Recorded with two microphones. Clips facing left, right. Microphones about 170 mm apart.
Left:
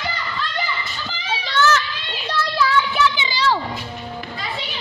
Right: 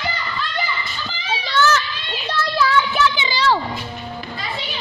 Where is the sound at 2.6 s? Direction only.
50° right (ahead or behind).